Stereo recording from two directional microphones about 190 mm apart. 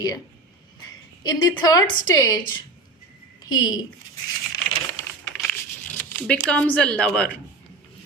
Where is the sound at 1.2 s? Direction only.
20° left (ahead or behind).